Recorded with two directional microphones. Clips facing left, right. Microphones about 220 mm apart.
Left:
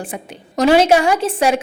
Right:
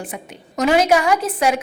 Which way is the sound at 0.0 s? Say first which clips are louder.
Left 3 dB; 30° left (ahead or behind).